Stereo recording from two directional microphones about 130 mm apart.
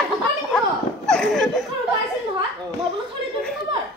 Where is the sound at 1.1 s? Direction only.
5° left (ahead or behind).